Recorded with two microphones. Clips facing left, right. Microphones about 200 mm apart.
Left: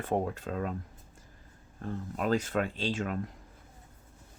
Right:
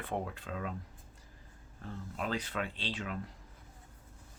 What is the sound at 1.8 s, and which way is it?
Speech, 45° left (ahead or behind).